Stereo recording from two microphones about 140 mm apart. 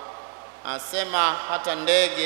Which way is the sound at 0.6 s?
20° right (ahead or behind).